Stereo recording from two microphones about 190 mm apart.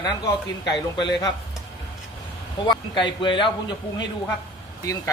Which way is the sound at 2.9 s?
25° left (ahead or behind).